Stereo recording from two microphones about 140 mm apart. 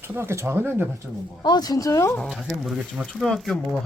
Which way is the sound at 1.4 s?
30° left (ahead or behind).